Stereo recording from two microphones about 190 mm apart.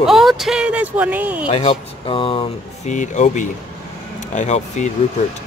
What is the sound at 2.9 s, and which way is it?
Speech, 40° left (ahead or behind).